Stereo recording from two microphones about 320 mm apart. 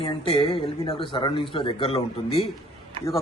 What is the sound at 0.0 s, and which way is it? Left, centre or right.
Speech, centre.